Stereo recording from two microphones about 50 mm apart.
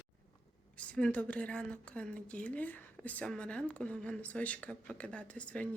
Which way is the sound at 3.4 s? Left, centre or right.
Left.